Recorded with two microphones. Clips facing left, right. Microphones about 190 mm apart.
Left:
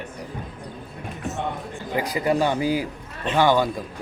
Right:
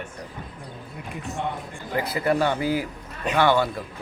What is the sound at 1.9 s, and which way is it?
A man's voice, 15° left (ahead or behind).